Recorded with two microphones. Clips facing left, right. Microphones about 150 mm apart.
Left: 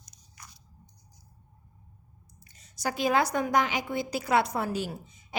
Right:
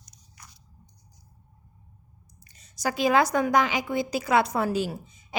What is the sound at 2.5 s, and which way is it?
A woman's voice, 90° right.